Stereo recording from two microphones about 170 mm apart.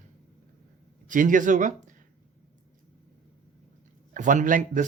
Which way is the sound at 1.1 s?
50° right (ahead or behind).